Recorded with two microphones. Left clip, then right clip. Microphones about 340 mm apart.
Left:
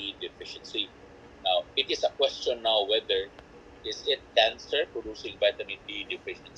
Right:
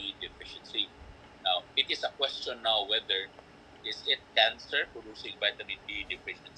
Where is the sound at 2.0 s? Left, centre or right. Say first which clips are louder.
Left 6 dB; right.